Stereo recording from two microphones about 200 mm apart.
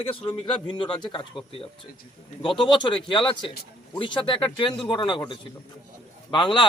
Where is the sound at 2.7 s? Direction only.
25° left (ahead or behind).